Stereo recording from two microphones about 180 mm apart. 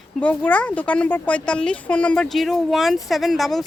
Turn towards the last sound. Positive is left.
turn(degrees=0)  # may be behind; listen again after turning